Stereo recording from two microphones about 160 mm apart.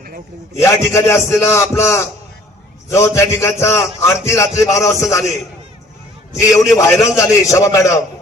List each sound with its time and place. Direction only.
0.5 s a man's voice: 15° left (ahead or behind)
6.7 s a man's voice: 20° left (ahead or behind)